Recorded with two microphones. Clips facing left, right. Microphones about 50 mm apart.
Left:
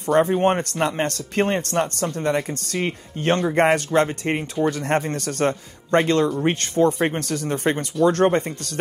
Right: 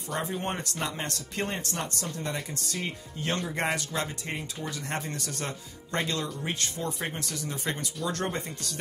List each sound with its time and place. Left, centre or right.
0.1 s speech: left